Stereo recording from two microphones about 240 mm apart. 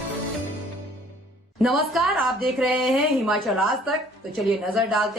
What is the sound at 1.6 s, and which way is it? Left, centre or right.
A woman's voice, centre.